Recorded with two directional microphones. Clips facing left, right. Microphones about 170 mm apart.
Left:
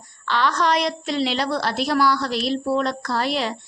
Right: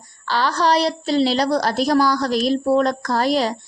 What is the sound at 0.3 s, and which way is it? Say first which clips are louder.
A woman's voice: right 2 dB; 35° right (ahead or behind).